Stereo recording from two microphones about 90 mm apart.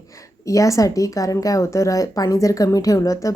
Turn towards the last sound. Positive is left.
turn(degrees=40)  # may be behind; listen again after turning